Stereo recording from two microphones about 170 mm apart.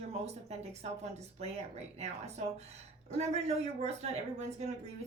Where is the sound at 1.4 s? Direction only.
40° right (ahead or behind).